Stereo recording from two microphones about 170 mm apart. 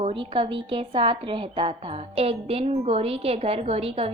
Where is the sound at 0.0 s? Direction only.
30° right (ahead or behind).